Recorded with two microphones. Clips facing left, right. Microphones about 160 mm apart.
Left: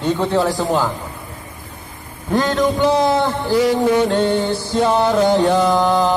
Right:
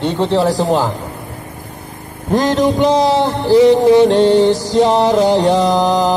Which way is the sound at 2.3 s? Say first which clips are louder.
Right 3 dB; 40° right (ahead or behind).